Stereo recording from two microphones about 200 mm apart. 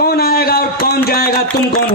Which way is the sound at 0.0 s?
50° left (ahead or behind).